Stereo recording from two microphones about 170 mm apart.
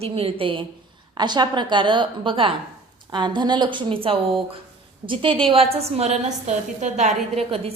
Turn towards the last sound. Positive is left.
turn(degrees=-35)  # may be behind; listen again after turning